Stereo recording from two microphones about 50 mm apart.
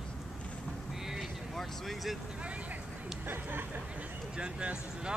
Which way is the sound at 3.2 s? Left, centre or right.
Right.